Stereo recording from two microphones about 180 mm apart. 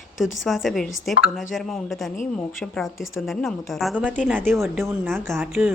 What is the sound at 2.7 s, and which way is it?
A woman's voice, centre (ahead or behind).